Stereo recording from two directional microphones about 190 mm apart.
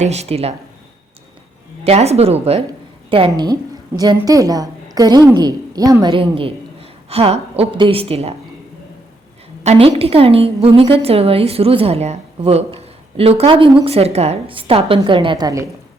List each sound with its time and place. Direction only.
0.0 s a woman's voice: 35° right (ahead or behind)
1.8 s a woman's voice: 35° right (ahead or behind)
9.6 s a woman's voice: 30° right (ahead or behind)